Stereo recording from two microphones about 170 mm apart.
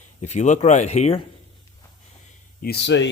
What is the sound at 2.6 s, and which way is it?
Speech, 75° left (ahead or behind).